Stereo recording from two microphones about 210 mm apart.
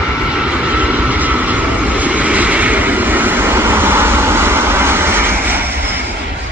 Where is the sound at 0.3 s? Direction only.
5° right (ahead or behind).